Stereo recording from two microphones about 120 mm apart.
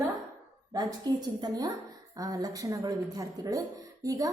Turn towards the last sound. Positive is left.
turn(degrees=-30)  # may be behind; listen again after turning